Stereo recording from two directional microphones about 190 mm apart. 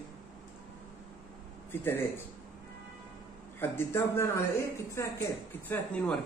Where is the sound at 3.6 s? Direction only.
10° left (ahead or behind).